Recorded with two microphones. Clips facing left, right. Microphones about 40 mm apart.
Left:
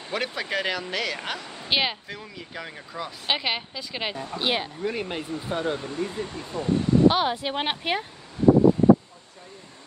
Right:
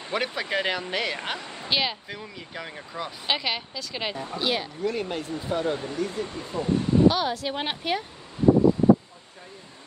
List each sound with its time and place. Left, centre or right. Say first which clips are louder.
0.1 s speech: right 1 dB; centre
1.7 s a woman's voice: left 1 dB; centre
2.0 s speech: even; centre
3.3 s a woman's voice: left 1 dB; centre
6.2 s speech: even; centre
7.1 s speech: left 1 dB; left